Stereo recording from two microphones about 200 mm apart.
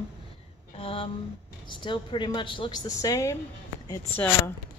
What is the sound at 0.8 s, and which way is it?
A woman's voice, 25° left (ahead or behind).